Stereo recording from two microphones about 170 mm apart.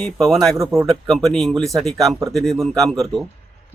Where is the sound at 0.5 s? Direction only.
15° right (ahead or behind).